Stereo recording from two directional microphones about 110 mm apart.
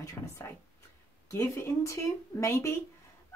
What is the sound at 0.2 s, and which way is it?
Speech, 20° left (ahead or behind).